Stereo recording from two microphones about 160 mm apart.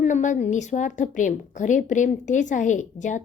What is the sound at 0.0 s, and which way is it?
A woman's voice, 50° left (ahead or behind).